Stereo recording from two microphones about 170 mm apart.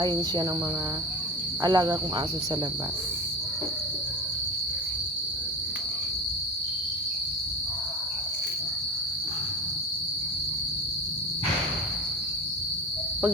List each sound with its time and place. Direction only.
0.0 s cricket: 25° right (ahead or behind)
1.6 s cricket: 25° right (ahead or behind)